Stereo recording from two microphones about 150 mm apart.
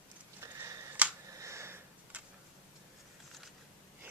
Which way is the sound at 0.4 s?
20° right (ahead or behind).